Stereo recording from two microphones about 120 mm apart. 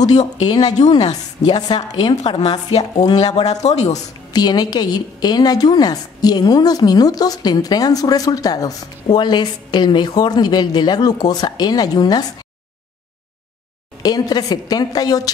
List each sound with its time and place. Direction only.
0.0 s speech: 70° left (ahead or behind)
0.5 s a woman's voice: 30° left (ahead or behind)
0.9 s a woman's voice: 65° left (ahead or behind)
1.4 s a woman's voice: 35° left (ahead or behind)
2.2 s a woman's voice: 60° left (ahead or behind)
4.3 s a woman's voice: 35° left (ahead or behind)
14.0 s a woman's voice: 35° left (ahead or behind)